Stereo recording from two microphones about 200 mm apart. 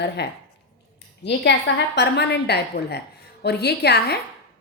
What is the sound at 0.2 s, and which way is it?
A woman's voice, 55° left (ahead or behind).